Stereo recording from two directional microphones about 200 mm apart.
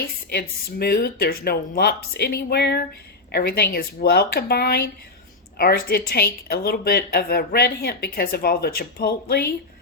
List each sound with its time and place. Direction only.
0.3 s a woman's voice: 50° left (ahead or behind)